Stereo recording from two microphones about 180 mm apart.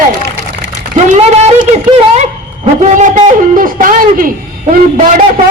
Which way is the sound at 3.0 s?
45° right (ahead or behind).